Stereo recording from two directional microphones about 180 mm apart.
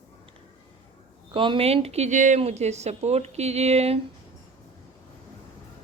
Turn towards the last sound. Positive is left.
turn(degrees=-35)  # may be behind; listen again after turning